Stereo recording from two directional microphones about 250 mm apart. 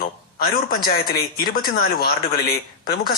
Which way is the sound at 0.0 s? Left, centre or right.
Left.